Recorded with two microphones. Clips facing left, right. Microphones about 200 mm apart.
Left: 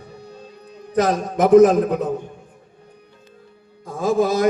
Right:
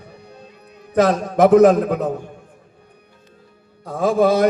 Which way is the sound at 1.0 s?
65° right (ahead or behind).